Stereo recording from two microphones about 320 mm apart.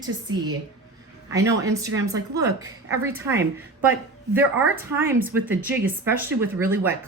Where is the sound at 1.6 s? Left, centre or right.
Centre.